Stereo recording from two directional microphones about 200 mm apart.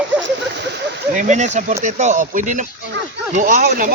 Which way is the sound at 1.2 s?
35° right (ahead or behind).